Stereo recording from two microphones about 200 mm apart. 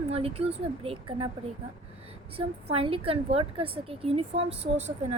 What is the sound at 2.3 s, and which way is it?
A woman's voice, 30° right (ahead or behind).